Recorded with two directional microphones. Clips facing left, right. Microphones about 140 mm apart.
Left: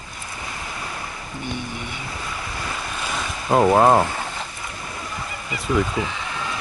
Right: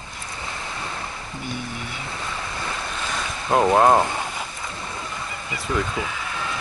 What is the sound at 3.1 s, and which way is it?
Boat, 5° left (ahead or behind).